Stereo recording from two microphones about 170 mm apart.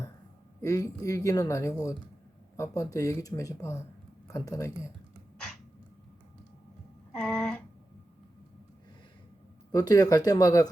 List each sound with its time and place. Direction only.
0.6 s speech: 20° left (ahead or behind)
7.1 s a sound: 5° left (ahead or behind)
9.7 s speech: 20° left (ahead or behind)